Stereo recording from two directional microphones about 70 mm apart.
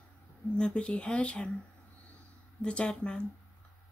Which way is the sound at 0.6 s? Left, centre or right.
Centre.